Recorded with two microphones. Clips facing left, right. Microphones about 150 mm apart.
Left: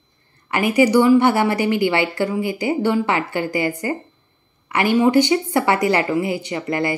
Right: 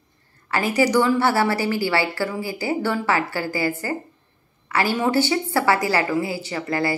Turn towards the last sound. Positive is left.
turn(degrees=20)  # may be behind; listen again after turning